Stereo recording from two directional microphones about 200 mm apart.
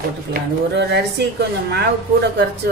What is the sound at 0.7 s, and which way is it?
A woman's voice, 60° right (ahead or behind).